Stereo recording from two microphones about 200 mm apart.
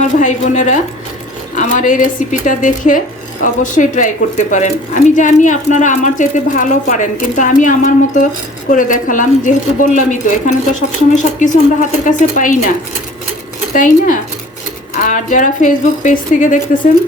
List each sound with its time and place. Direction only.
0.2 s speech: 40° left (ahead or behind)
13.7 s speech: 40° left (ahead or behind)